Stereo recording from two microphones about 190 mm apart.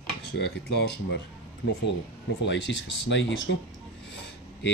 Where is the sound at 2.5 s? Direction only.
75° left (ahead or behind).